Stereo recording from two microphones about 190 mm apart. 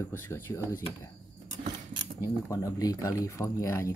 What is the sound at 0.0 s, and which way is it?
Speech, 15° left (ahead or behind).